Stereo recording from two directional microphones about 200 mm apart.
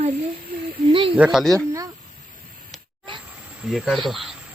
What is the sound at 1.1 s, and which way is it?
Speech, 5° right (ahead or behind).